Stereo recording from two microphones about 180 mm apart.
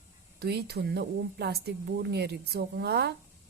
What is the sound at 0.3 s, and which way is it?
A woman's voice, 60° right (ahead or behind).